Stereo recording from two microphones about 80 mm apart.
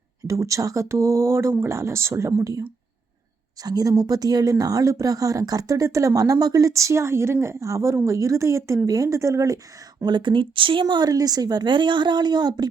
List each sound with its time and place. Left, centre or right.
0.3 s speech: right
10.1 s speech: right
11.1 s a woman's voice: right